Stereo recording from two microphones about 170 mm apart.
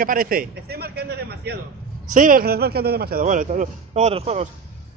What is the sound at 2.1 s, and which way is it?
A man's voice, 50° right (ahead or behind).